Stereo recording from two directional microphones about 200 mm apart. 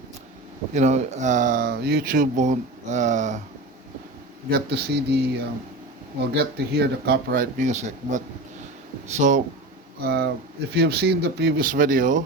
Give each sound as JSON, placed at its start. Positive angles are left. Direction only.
{"t": 0.7, "sound": "speech", "side_deg": -35}
{"t": 4.4, "sound": "speech", "side_deg": -50}
{"t": 6.3, "sound": "speech", "side_deg": -55}
{"t": 10.0, "sound": "speech", "side_deg": -55}